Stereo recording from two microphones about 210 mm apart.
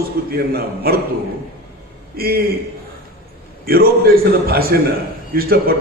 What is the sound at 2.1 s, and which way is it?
Speech, 45° right (ahead or behind).